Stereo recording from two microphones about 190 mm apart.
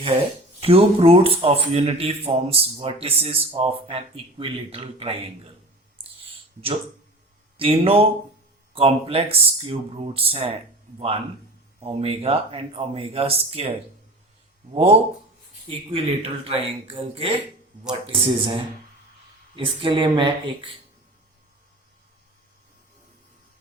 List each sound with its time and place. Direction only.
0.6 s a man's voice: 30° right (ahead or behind)
7.5 s a man's voice: 30° right (ahead or behind)